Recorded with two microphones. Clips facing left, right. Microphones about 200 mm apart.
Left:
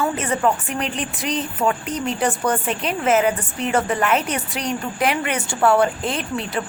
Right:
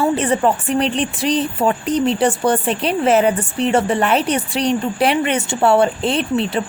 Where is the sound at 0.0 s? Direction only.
30° right (ahead or behind).